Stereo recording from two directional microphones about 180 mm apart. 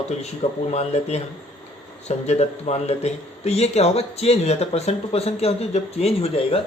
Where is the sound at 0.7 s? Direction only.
40° left (ahead or behind).